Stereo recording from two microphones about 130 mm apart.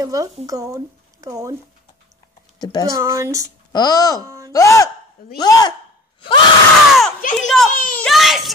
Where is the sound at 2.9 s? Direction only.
25° right (ahead or behind).